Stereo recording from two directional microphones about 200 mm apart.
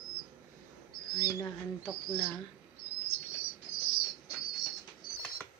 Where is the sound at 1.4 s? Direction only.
15° left (ahead or behind).